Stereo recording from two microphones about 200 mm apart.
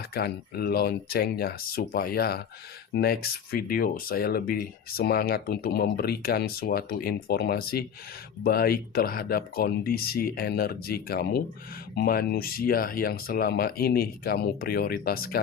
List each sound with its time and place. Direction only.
0.1 s speech: 50° left (ahead or behind)